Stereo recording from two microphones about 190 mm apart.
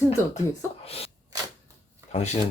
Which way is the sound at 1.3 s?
20° right (ahead or behind).